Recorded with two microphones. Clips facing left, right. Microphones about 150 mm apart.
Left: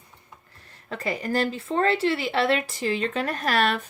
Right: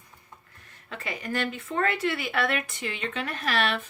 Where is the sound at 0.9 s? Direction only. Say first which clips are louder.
Left 6 dB; 35° left (ahead or behind).